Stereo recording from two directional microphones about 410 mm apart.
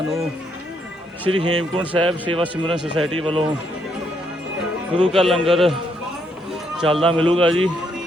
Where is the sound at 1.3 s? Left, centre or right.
Right.